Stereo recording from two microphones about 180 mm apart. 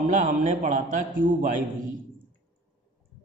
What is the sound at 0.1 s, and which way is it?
A man's voice, 45° right (ahead or behind).